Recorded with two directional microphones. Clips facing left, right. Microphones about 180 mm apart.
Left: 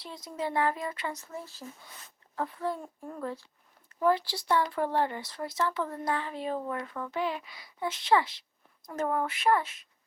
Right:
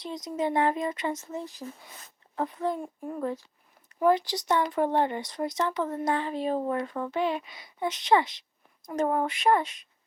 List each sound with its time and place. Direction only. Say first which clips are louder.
0.0 s speech: right 5 dB; 20° right (ahead or behind)